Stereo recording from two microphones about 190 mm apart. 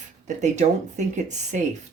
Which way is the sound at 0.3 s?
40° right (ahead or behind).